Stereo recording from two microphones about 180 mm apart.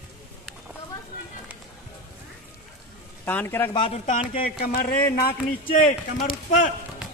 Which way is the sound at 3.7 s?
25° left (ahead or behind).